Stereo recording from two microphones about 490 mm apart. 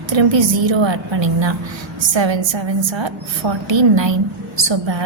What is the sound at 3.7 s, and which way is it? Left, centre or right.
A woman's voice, right.